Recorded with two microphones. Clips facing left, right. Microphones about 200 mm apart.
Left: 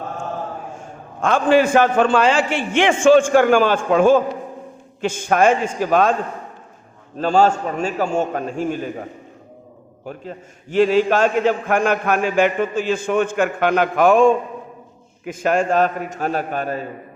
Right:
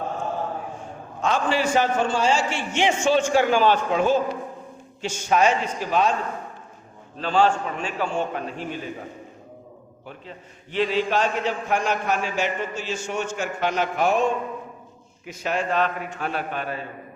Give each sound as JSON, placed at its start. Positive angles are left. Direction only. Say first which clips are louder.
{"t": 1.2, "sound": "a man's voice", "louder": "left 8 dB", "side_deg": 55}
{"t": 7.2, "sound": "a man's voice", "louder": "left 5 dB", "side_deg": 45}
{"t": 10.1, "sound": "a man's voice", "louder": "left 8 dB", "side_deg": 45}